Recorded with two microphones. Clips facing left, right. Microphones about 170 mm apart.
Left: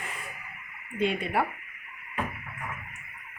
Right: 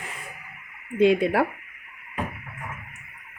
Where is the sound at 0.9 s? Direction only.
90° right.